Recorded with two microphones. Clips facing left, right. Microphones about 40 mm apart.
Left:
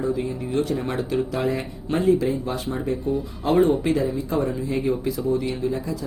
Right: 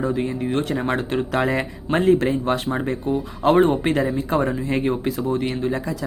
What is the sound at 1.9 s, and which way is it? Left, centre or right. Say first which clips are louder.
Speech: right 2 dB; right.